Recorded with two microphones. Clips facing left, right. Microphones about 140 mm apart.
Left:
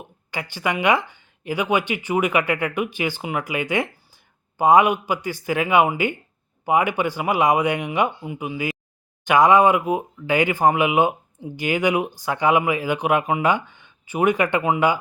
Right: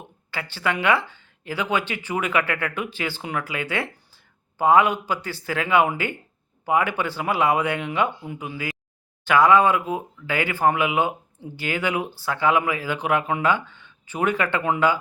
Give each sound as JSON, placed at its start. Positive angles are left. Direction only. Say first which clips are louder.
{"t": 0.3, "sound": "speech", "louder": "left 1 dB", "side_deg": 15}